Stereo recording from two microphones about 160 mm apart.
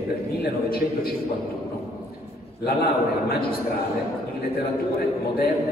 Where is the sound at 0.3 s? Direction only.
70° left (ahead or behind).